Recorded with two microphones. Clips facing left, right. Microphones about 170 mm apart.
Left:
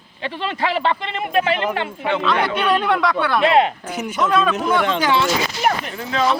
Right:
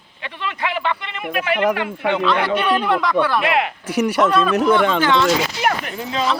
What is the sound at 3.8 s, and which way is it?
Speech, 75° right (ahead or behind).